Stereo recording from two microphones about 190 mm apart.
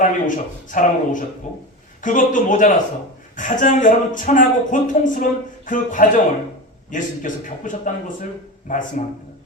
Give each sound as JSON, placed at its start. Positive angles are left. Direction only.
{"t": 0.0, "sound": "a man's voice", "side_deg": 45}